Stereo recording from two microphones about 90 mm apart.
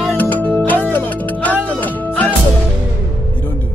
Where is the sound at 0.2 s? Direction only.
20° left (ahead or behind).